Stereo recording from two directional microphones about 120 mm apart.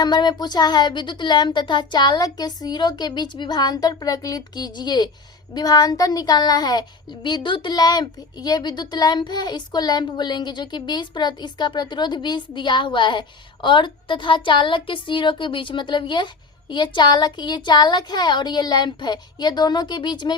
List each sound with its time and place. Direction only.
0.0 s speech: 35° left (ahead or behind)